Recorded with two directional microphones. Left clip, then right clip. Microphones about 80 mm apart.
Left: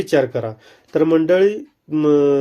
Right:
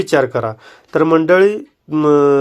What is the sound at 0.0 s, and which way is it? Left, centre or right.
A man's voice, right.